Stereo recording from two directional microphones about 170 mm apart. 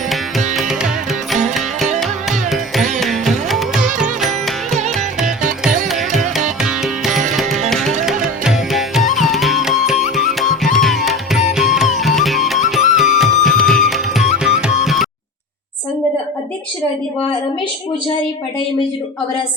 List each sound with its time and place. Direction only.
0.5 s music: centre (ahead or behind)
2.0 s music: centre (ahead or behind)